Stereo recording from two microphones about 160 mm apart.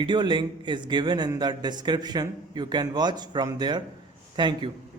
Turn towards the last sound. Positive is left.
turn(degrees=-30)  # may be behind; listen again after turning